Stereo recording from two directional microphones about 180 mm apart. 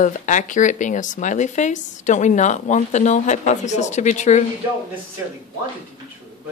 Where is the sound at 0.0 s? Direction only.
45° left (ahead or behind).